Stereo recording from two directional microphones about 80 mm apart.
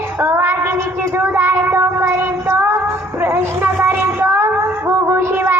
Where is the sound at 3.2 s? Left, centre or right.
Right.